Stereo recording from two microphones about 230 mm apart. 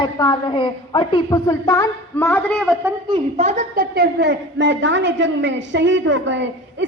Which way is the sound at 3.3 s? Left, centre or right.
Right.